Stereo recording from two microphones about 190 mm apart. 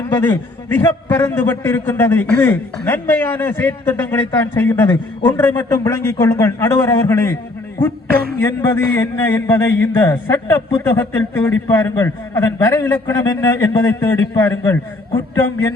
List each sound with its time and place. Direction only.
0.7 s a man's voice: 10° left (ahead or behind)
8.4 s a man's voice: 15° left (ahead or behind)